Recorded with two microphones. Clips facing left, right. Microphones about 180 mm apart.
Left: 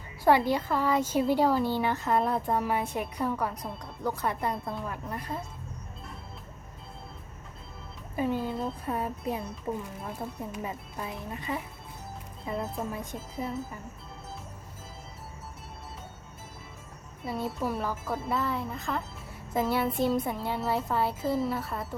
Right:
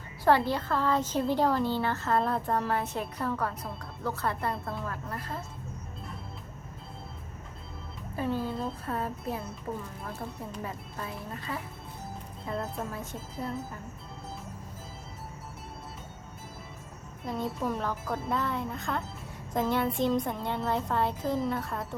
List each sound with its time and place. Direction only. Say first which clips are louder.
0.3 s speech: left 1 dB; 15° left (ahead or behind)
8.1 s speech: left 2 dB; 15° left (ahead or behind)
17.2 s a child's voice: even; 5° left (ahead or behind)